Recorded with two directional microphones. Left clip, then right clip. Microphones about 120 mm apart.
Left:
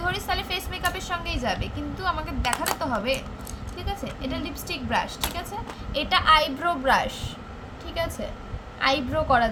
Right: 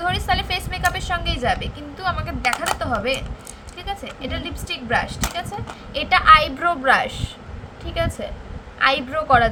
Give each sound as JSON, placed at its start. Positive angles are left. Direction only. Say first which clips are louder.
{"t": 0.0, "sound": "a woman's voice", "louder": "right 6 dB", "side_deg": -25}
{"t": 8.8, "sound": "a woman's voice", "louder": "right 4 dB", "side_deg": -30}